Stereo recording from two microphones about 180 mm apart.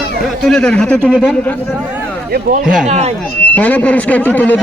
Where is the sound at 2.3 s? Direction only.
50° right (ahead or behind).